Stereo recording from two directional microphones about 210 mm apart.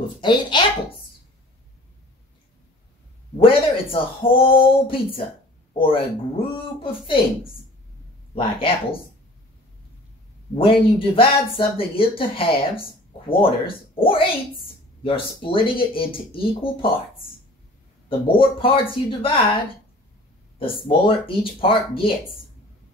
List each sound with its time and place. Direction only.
0.2 s speech: 20° left (ahead or behind)
3.3 s speech: 25° left (ahead or behind)
8.4 s speech: 25° left (ahead or behind)
10.5 s speech: 25° left (ahead or behind)
18.0 s speech: 25° left (ahead or behind)
20.8 s speech: 25° left (ahead or behind)